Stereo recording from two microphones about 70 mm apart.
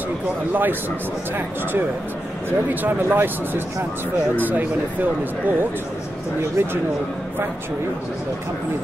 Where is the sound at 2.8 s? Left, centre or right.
Right.